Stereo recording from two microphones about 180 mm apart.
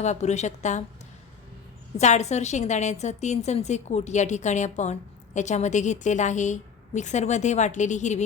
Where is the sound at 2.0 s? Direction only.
40° left (ahead or behind).